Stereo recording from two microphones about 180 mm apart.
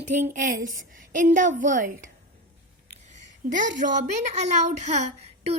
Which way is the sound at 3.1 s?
45° right (ahead or behind).